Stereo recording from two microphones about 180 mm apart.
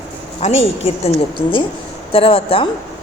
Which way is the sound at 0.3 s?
35° left (ahead or behind).